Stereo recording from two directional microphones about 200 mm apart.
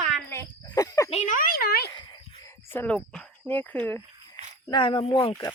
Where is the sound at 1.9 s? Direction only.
20° left (ahead or behind).